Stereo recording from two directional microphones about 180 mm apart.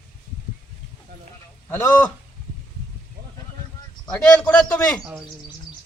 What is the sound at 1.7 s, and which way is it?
Speech, 10° left (ahead or behind).